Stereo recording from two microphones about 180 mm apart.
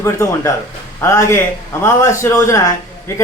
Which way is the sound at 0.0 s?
20° left (ahead or behind).